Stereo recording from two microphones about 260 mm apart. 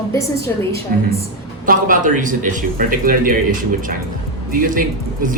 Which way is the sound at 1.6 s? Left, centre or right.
Right.